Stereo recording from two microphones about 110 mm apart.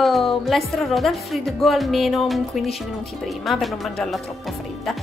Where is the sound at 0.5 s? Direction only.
Centre (ahead or behind).